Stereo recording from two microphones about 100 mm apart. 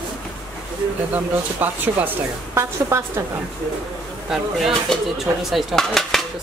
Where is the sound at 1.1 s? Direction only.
15° right (ahead or behind).